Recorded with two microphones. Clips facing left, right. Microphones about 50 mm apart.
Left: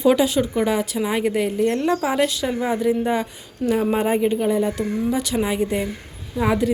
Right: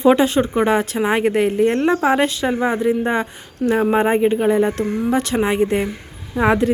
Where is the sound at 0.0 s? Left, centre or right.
Right.